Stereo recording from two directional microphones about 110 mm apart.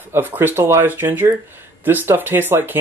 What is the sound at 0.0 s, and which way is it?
Speech, 20° right (ahead or behind).